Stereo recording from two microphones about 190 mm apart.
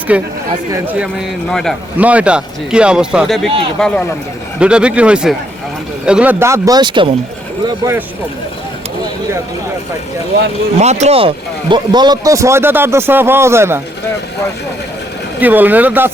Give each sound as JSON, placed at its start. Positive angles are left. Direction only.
{"t": 0.1, "sound": "speech", "side_deg": -5}
{"t": 10.8, "sound": "speech", "side_deg": -35}
{"t": 15.4, "sound": "speech", "side_deg": -10}